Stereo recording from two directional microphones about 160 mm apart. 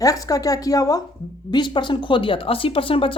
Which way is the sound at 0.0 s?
20° left (ahead or behind).